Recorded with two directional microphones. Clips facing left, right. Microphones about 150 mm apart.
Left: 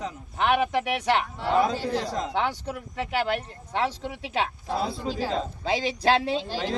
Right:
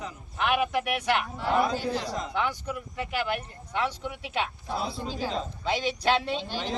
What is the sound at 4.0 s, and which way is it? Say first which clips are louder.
Speech: left 3 dB; 90° left.